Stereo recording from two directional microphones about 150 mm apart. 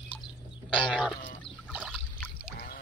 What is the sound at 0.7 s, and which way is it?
Goat, 5° left (ahead or behind).